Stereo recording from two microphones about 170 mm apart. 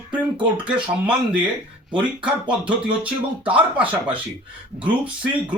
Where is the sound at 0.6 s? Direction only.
5° right (ahead or behind).